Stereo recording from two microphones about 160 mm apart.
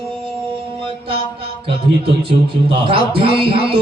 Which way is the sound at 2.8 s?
35° right (ahead or behind).